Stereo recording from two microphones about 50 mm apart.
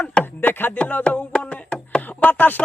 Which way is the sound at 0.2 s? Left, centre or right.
Left.